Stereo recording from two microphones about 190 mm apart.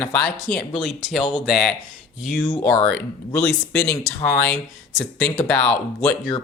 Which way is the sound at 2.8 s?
5° left (ahead or behind).